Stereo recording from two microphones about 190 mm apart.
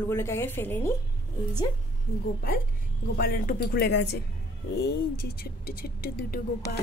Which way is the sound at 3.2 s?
50° left (ahead or behind).